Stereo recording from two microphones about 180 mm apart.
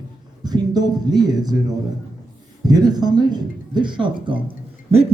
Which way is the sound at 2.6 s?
20° right (ahead or behind).